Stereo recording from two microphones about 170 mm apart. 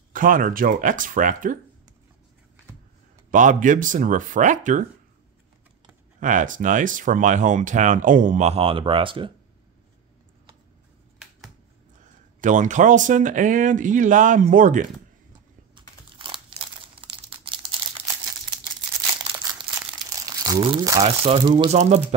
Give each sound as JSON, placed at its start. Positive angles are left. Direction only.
{"t": 0.1, "sound": "speech", "side_deg": -55}
{"t": 3.3, "sound": "speech", "side_deg": -50}
{"t": 6.1, "sound": "speech", "side_deg": -50}
{"t": 12.0, "sound": "speech", "side_deg": -45}
{"t": 15.7, "sound": "crumpling", "side_deg": -30}
{"t": 19.4, "sound": "crumpling", "side_deg": -20}
{"t": 20.6, "sound": "speech", "side_deg": -25}
{"t": 21.0, "sound": "speech", "side_deg": -35}
{"t": 21.6, "sound": "speech", "side_deg": -40}